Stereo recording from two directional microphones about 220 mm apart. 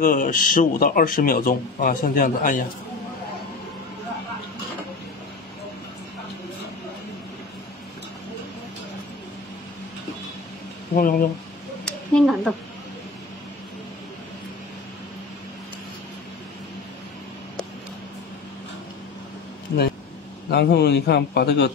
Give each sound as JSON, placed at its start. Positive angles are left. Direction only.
{"t": 0.0, "sound": "speech", "side_deg": 40}
{"t": 11.0, "sound": "speech", "side_deg": 40}
{"t": 11.8, "sound": "a sound", "side_deg": 5}
{"t": 20.5, "sound": "a man's voice", "side_deg": 50}